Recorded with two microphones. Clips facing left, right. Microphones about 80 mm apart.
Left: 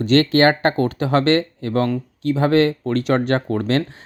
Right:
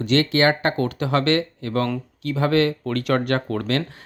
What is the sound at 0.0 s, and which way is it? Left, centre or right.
Speech, left.